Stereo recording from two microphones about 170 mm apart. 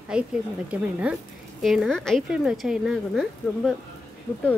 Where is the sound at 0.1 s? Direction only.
5° right (ahead or behind).